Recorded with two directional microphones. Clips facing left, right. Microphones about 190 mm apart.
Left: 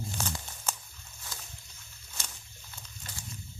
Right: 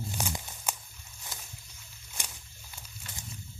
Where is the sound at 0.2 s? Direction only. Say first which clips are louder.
Right 1 dB; 15° right (ahead or behind).